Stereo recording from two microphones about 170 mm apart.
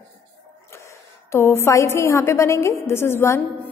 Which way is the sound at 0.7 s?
15° left (ahead or behind).